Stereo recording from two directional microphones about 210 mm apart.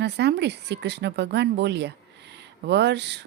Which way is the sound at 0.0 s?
55° right (ahead or behind).